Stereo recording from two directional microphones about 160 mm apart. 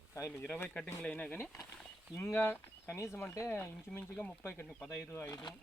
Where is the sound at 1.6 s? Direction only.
5° left (ahead or behind).